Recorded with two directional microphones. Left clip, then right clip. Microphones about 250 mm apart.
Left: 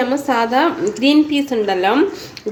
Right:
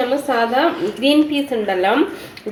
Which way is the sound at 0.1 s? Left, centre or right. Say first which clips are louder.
Left 1 dB; left.